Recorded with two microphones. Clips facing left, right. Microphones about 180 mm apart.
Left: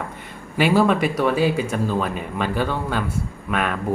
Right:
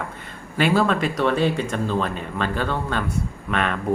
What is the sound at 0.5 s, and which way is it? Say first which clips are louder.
Speech: left 2 dB; 10° left (ahead or behind).